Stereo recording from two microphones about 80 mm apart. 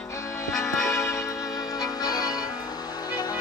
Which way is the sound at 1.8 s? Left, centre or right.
Left.